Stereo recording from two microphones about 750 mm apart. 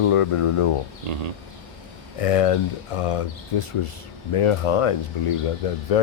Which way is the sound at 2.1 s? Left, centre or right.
Left.